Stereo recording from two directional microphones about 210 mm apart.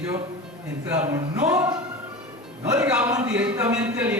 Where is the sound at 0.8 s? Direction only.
15° right (ahead or behind).